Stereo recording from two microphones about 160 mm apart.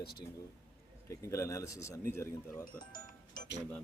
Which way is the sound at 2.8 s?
60° left (ahead or behind).